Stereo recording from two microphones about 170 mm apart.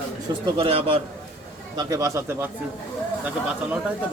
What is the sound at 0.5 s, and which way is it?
Speech, 30° right (ahead or behind).